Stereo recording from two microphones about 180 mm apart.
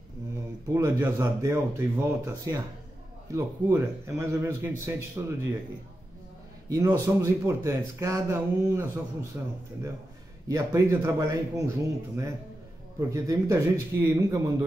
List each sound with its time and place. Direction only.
0.7 s a man's voice: 25° right (ahead or behind)
3.6 s speech: 15° right (ahead or behind)
6.7 s speech: 20° right (ahead or behind)
10.5 s speech: 15° right (ahead or behind)